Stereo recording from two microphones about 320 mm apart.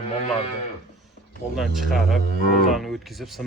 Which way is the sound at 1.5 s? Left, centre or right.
Centre.